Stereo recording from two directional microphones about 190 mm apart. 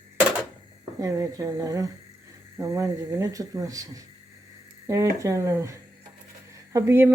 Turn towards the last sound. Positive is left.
turn(degrees=-15)  # may be behind; listen again after turning